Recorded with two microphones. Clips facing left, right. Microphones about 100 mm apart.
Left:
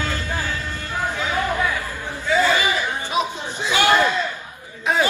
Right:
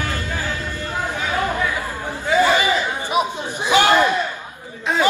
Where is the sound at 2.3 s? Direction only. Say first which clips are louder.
Right 2 dB; 20° right (ahead or behind).